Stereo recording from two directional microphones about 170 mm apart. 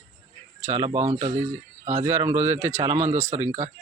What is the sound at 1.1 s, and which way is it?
Speech, 25° right (ahead or behind).